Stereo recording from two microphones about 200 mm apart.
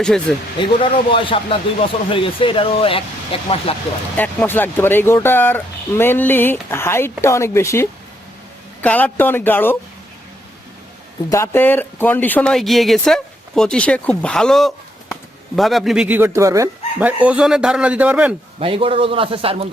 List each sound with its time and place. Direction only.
0.0 s speech: 5° left (ahead or behind)
0.8 s speech: 25° left (ahead or behind)
4.2 s speech: 10° left (ahead or behind)
11.3 s speech: 10° left (ahead or behind); by 18.3 s 5° right (ahead or behind)
18.6 s a man's voice: 25° right (ahead or behind)